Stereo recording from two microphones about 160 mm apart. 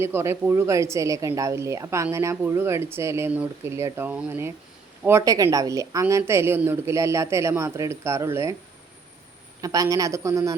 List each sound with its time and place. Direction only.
0.0 s speech: 15° right (ahead or behind)
9.6 s a man's voice: 20° right (ahead or behind)